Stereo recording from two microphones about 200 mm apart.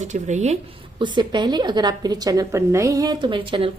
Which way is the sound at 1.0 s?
20° right (ahead or behind).